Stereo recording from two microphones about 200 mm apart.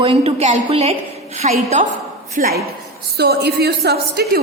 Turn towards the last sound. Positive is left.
turn(degrees=-55)  # may be behind; listen again after turning